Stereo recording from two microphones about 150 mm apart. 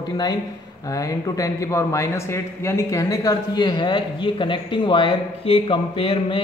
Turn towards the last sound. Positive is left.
turn(degrees=35)  # may be behind; listen again after turning